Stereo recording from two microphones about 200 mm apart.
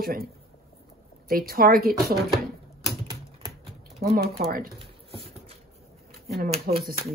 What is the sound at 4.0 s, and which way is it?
Speech, 50° right (ahead or behind).